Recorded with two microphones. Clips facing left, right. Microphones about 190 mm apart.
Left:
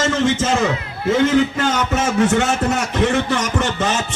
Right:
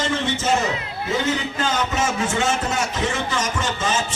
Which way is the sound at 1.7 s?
55° left (ahead or behind).